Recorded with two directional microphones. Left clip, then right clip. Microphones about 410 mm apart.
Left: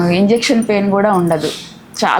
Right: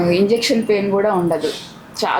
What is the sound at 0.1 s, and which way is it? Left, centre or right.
A woman's voice, left.